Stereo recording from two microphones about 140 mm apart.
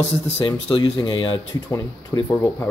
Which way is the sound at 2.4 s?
15° left (ahead or behind).